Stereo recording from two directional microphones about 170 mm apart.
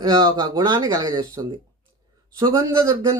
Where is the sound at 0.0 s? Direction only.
20° right (ahead or behind).